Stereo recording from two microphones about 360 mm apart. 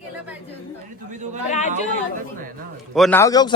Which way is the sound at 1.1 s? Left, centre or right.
Centre.